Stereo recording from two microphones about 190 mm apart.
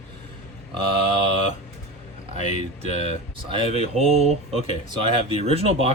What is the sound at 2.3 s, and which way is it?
Speech, 40° left (ahead or behind).